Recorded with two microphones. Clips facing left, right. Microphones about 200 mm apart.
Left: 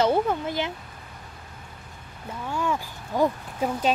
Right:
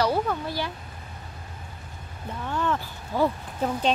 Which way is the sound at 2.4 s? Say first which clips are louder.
Even; 10° left (ahead or behind).